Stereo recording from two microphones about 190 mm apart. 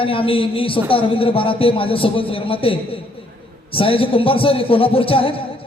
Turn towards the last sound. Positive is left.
turn(degrees=30)  # may be behind; listen again after turning